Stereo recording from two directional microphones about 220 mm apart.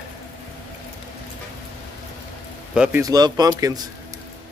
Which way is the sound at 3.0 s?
15° right (ahead or behind).